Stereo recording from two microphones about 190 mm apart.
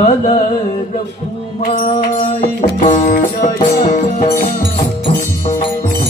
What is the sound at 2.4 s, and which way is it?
Music, 40° left (ahead or behind).